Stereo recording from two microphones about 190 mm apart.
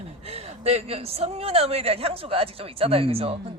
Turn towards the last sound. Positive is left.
turn(degrees=-30)  # may be behind; listen again after turning